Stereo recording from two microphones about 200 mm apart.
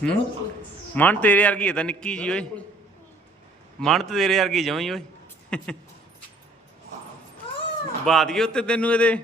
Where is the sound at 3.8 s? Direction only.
Centre (ahead or behind).